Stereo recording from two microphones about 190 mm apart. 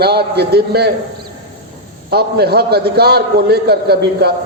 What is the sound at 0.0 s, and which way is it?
Speech, 55° right (ahead or behind).